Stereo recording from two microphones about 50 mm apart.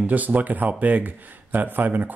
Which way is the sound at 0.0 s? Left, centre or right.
Right.